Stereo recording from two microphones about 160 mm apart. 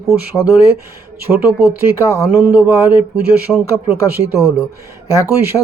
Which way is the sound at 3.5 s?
10° left (ahead or behind).